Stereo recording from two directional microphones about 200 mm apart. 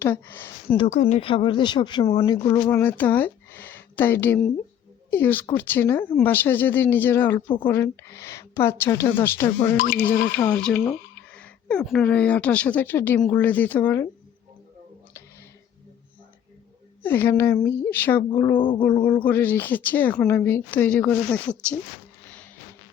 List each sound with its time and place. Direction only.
0.0 s speech: 10° left (ahead or behind)
0.9 s speech: 35° left (ahead or behind)
2.6 s speech: 10° left (ahead or behind)
9.7 s speech: 45° left (ahead or behind)
10.3 s speech: 5° left (ahead or behind)
17.0 s speech: 10° left (ahead or behind)